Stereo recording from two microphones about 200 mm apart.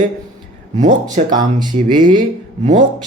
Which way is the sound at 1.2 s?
35° right (ahead or behind).